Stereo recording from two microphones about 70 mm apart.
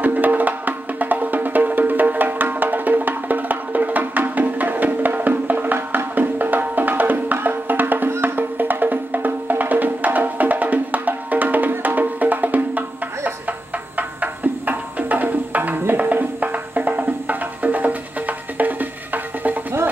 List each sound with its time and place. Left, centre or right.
0.0 s music: right